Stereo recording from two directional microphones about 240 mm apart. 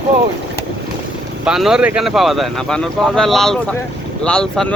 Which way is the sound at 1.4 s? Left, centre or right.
Centre.